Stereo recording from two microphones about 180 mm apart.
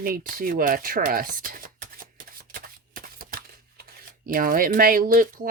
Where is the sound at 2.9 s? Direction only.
50° right (ahead or behind).